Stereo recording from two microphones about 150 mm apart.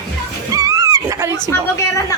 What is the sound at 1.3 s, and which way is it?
Speech, 20° left (ahead or behind).